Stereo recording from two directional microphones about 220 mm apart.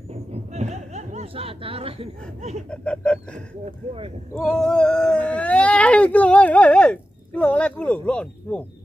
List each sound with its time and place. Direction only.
0.1 s a sound: 30° right (ahead or behind)
2.7 s speech: 5° left (ahead or behind)
3.6 s speech: 25° right (ahead or behind)
4.4 s speech: centre (ahead or behind)